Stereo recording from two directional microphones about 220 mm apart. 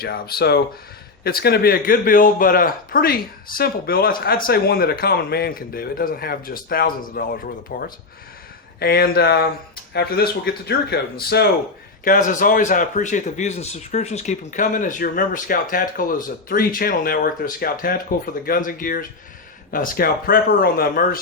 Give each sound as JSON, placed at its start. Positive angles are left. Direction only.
{"t": 0.0, "sound": "speech", "side_deg": 45}